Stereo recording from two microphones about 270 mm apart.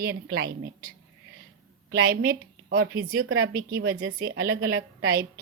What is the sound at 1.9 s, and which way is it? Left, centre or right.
A woman's voice, right.